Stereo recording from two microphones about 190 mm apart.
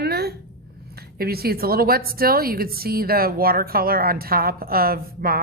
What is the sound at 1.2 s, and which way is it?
A woman's voice, 55° right (ahead or behind).